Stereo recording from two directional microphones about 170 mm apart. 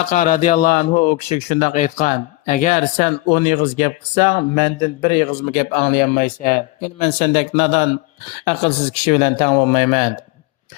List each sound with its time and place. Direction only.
0.1 s a man's voice: 50° left (ahead or behind)